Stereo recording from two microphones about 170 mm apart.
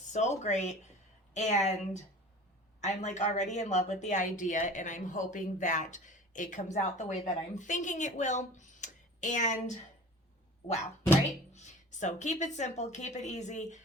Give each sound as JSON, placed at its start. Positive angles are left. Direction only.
{"t": 0.1, "sound": "speech", "side_deg": 45}
{"t": 11.5, "sound": "speech", "side_deg": 45}